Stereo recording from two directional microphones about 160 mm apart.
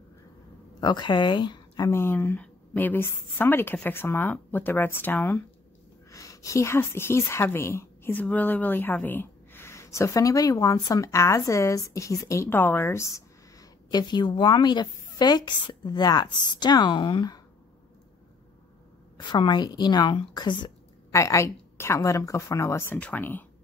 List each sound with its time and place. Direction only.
0.7 s a woman's voice: 25° left (ahead or behind)
1.9 s a woman's voice: 15° left (ahead or behind)
19.1 s a woman's voice: 30° left (ahead or behind); by 23.4 s 10° left (ahead or behind)